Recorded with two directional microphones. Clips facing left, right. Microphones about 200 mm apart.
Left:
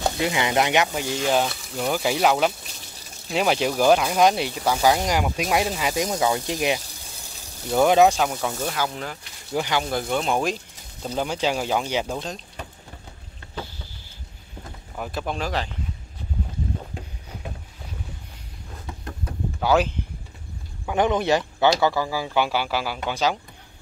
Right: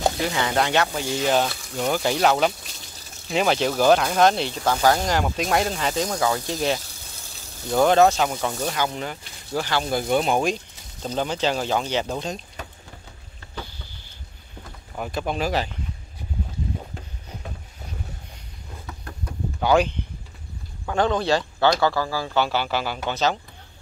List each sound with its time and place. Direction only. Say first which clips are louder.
0.2 s speech: left 1 dB; 15° left (ahead or behind)
1.0 s speech: right 1 dB; 10° right (ahead or behind)
1.3 s speech: left 1 dB; centre (ahead or behind)
9.5 s speech: left 1 dB; 15° left (ahead or behind)
10.0 s speech: right 3 dB; 15° right (ahead or behind)
10.3 s speech: right 2 dB; centre (ahead or behind)
15.0 s speech: right 2 dB; centre (ahead or behind)
19.6 s speech: right 1 dB; 5° left (ahead or behind)
20.8 s speech: left 1 dB; 15° left (ahead or behind)